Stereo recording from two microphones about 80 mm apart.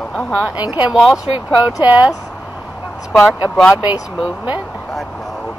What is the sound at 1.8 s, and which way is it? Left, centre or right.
Speech, centre.